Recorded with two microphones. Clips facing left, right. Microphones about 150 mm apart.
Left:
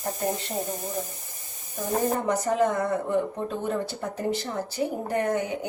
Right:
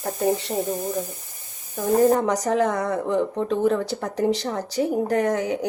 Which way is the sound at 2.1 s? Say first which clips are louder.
Right 3 dB; 90° right.